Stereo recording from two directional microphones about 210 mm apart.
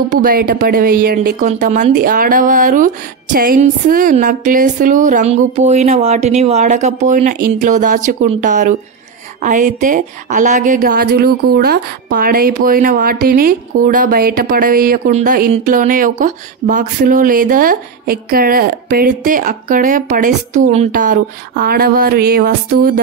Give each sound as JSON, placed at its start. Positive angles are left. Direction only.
{"t": 0.1, "sound": "a woman's voice", "side_deg": -40}